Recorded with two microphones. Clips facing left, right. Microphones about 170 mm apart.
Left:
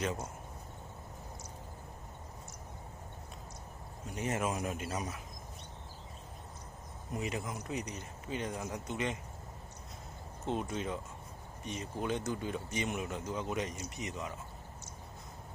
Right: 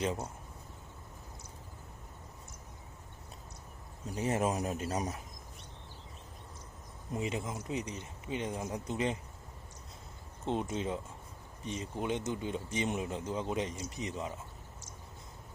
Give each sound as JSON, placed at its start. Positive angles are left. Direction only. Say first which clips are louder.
{"t": 4.1, "sound": "speech", "louder": "right 3 dB", "side_deg": -30}
{"t": 7.1, "sound": "speech", "louder": "right 2 dB", "side_deg": -25}
{"t": 10.4, "sound": "speech", "louder": "right 2 dB", "side_deg": -25}